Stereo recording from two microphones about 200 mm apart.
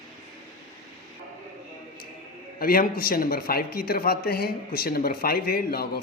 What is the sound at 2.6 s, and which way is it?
Speech, 45° left (ahead or behind).